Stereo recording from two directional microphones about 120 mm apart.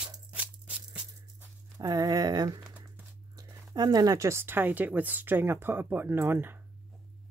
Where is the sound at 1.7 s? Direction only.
30° right (ahead or behind).